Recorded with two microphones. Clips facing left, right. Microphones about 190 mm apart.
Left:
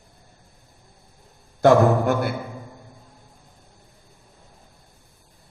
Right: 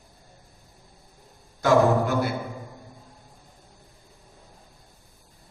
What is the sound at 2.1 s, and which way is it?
Music, 55° left (ahead or behind).